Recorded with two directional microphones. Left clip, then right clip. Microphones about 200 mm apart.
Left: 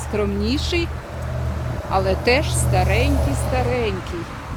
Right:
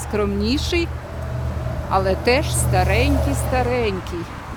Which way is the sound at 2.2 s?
60° right (ahead or behind).